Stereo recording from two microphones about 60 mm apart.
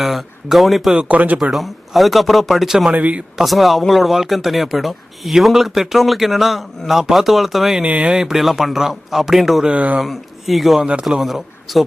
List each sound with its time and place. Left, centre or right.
0.0 s speech: centre
0.9 s speech: right
1.4 s speech: centre
2.9 s speech: right
3.3 s speech: centre
7.8 s speech: centre
9.6 s speech: right
10.0 s speech: centre